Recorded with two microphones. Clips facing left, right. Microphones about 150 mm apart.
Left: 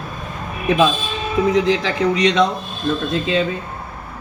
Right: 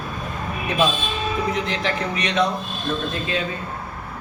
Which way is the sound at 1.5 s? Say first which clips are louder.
Left 7 dB; 90° left.